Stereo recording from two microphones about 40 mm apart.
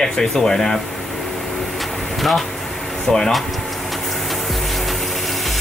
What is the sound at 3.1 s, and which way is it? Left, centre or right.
Speech, centre.